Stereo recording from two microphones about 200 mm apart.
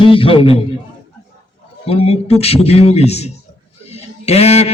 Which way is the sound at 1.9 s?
30° left (ahead or behind).